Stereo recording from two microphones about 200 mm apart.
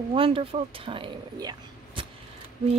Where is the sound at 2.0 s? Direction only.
25° right (ahead or behind).